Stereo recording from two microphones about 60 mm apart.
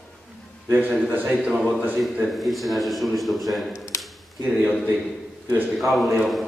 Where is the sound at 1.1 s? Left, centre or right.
Right.